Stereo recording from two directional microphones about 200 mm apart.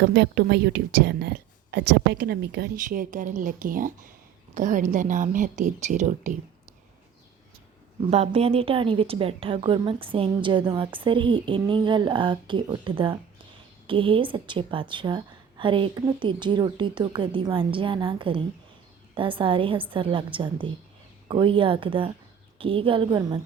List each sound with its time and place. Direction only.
0.0 s a woman's voice: 55° right (ahead or behind)
2.8 s a woman's voice: 40° right (ahead or behind)
8.0 s a woman's voice: 30° right (ahead or behind)